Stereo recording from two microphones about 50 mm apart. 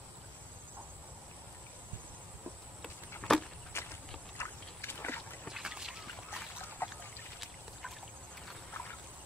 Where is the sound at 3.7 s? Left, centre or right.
Left.